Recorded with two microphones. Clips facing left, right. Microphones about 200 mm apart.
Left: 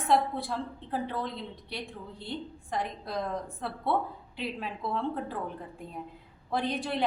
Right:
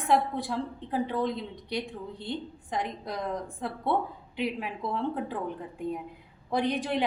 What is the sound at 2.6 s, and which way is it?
A woman's voice, 15° right (ahead or behind).